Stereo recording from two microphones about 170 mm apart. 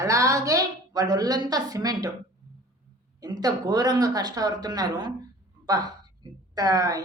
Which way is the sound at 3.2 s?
20° right (ahead or behind).